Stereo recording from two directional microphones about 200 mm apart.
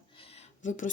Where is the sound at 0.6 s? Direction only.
40° left (ahead or behind).